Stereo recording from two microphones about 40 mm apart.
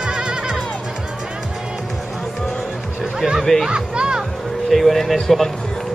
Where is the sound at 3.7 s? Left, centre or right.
Right.